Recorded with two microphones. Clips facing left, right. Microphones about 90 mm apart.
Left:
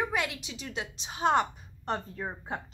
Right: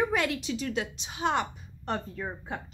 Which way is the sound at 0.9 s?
35° left (ahead or behind).